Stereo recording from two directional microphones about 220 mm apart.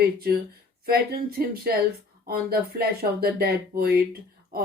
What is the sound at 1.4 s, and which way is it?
Speech, 45° right (ahead or behind).